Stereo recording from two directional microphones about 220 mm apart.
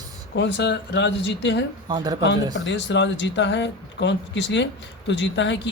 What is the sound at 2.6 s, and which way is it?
Speech, 55° left (ahead or behind).